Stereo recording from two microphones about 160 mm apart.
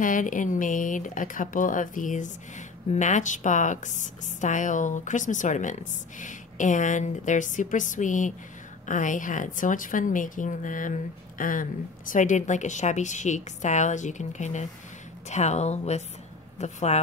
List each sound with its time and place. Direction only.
0.0 s a woman's voice: 55° left (ahead or behind)